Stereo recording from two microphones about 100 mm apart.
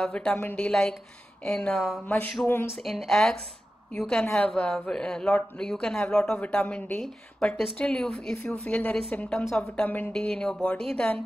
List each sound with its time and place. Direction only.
0.0 s speech: 10° left (ahead or behind)
2.8 s speech: centre (ahead or behind); by 10.1 s 20° left (ahead or behind)
10.1 s speech: 5° left (ahead or behind)